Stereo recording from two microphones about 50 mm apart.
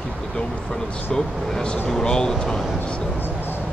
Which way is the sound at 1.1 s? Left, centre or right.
Centre.